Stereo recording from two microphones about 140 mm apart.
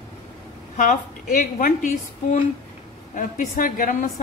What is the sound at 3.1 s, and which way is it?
A woman's voice, 85° left.